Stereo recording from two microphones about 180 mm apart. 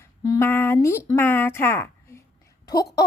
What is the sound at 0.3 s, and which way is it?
A woman's voice, 10° left (ahead or behind).